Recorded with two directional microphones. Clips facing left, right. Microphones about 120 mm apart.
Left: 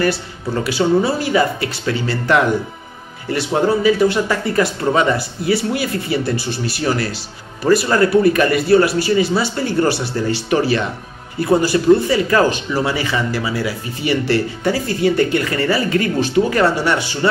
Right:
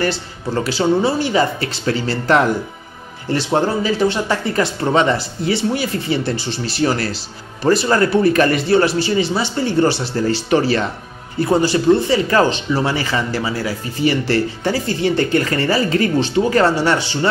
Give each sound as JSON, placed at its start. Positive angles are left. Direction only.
{"t": 0.7, "sound": "speech", "side_deg": -30}